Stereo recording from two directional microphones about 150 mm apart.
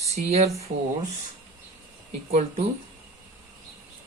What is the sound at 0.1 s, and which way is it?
Speech, 45° right (ahead or behind).